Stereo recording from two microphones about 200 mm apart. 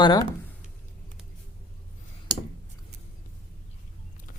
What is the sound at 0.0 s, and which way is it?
Speech, 20° left (ahead or behind).